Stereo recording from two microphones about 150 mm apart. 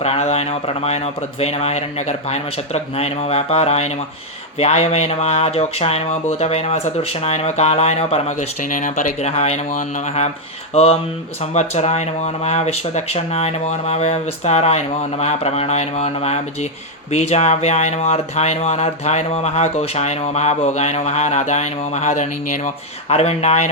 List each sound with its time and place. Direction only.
0.0 s speech: 45° left (ahead or behind)
11.5 s speech: 45° left (ahead or behind)